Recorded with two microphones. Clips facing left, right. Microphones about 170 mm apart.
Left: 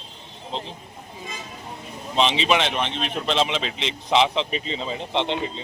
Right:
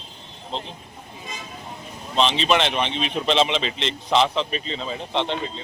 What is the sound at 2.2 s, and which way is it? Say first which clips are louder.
Speech: even; 15° left (ahead or behind).